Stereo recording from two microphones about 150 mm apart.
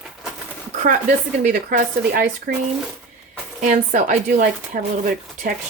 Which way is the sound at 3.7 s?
55° right (ahead or behind).